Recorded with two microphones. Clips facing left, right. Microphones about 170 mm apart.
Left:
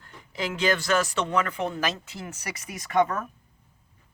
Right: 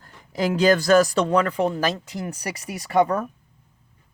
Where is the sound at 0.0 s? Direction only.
40° right (ahead or behind).